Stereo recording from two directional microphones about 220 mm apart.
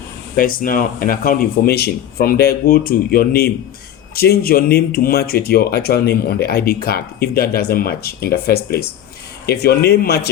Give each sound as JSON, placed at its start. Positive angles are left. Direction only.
{"t": 0.3, "sound": "speech", "side_deg": 40}